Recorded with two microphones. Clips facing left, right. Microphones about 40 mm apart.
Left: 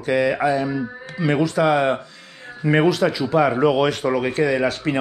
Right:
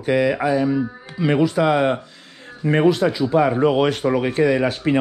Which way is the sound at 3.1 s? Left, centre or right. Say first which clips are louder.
Right 1 dB; left.